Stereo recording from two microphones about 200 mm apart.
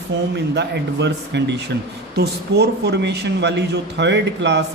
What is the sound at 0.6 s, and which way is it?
Speech, 60° right (ahead or behind).